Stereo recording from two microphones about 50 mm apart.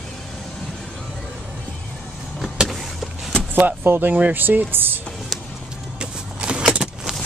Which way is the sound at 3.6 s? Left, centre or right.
Right.